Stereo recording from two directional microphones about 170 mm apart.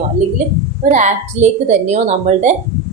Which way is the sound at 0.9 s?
45° right (ahead or behind).